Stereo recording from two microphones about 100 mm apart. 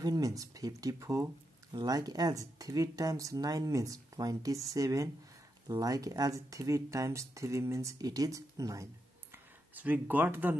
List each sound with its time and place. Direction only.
0.0 s speech: 40° right (ahead or behind)
9.3 s speech: 20° right (ahead or behind)